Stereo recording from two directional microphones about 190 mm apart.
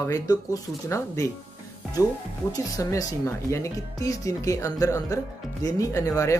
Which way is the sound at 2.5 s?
15° left (ahead or behind).